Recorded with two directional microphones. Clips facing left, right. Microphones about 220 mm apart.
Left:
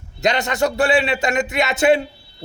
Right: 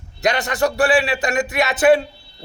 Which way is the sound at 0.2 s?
25° left (ahead or behind).